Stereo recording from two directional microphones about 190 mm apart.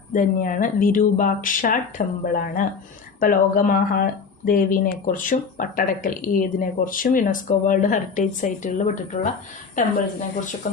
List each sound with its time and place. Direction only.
0.1 s a woman's voice: 45° left (ahead or behind)